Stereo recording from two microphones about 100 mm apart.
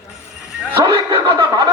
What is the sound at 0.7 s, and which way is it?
Speech, 30° right (ahead or behind).